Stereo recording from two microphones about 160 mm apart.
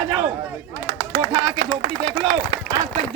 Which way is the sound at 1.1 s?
60° right (ahead or behind).